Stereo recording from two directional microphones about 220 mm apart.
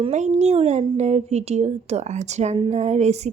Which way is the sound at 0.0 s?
30° right (ahead or behind).